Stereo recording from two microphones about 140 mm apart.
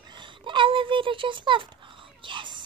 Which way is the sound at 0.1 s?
35° right (ahead or behind).